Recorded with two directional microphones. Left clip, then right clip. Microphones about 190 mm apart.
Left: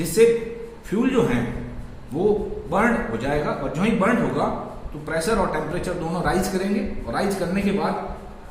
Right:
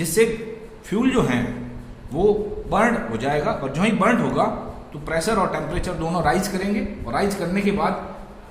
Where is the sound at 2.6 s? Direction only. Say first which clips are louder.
Right 1 dB; 40° right (ahead or behind).